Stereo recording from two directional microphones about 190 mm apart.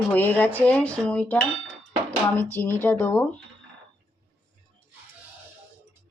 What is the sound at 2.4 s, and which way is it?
Speech, 15° right (ahead or behind).